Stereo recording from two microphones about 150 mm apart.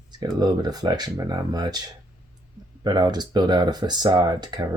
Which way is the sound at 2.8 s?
30° right (ahead or behind).